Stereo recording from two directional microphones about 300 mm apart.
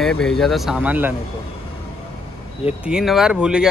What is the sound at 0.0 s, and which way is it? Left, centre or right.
Speech, centre.